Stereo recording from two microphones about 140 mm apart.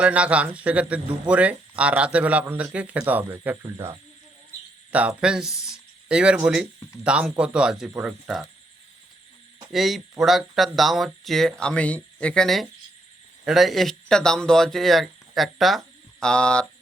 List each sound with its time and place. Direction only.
0.0 s speech: 10° right (ahead or behind)
4.9 s speech: 10° right (ahead or behind)
9.7 s speech: centre (ahead or behind)